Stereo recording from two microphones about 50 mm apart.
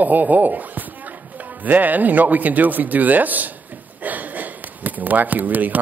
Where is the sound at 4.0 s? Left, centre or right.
Right.